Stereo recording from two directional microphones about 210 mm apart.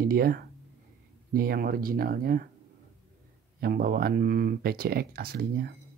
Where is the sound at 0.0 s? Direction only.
45° right (ahead or behind).